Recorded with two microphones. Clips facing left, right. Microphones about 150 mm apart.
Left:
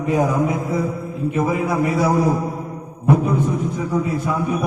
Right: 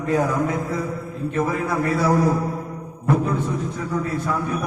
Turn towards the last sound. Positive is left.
turn(degrees=15)  # may be behind; listen again after turning